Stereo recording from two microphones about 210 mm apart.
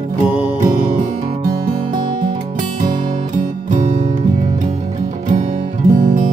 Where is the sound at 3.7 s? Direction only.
35° right (ahead or behind).